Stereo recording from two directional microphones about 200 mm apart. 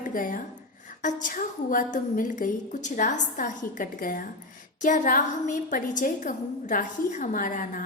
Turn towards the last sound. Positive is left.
turn(degrees=40)  # may be behind; listen again after turning